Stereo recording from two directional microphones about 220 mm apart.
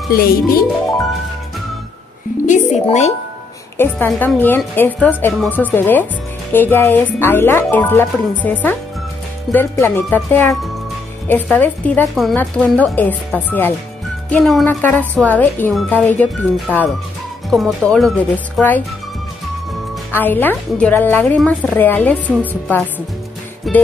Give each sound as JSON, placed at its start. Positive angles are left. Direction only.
{"t": 0.1, "sound": "speech", "side_deg": 45}
{"t": 2.4, "sound": "speech", "side_deg": 35}
{"t": 3.7, "sound": "a woman's voice", "side_deg": 10}
{"t": 20.1, "sound": "a woman's voice", "side_deg": 10}
{"t": 23.6, "sound": "music", "side_deg": 0}